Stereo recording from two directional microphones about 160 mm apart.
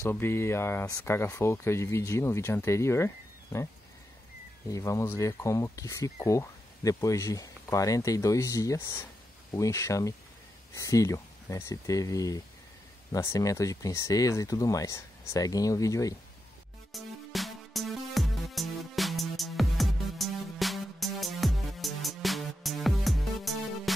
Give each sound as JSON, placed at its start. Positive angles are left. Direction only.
{"t": 0.0, "sound": "speech", "side_deg": 15}
{"t": 4.6, "sound": "speech", "side_deg": 20}
{"t": 16.9, "sound": "music", "side_deg": 0}